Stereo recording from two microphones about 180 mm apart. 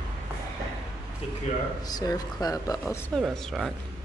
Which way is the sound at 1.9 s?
20° left (ahead or behind).